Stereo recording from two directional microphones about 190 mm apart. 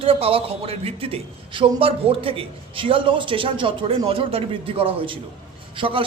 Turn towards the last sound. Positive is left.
turn(degrees=-25)  # may be behind; listen again after turning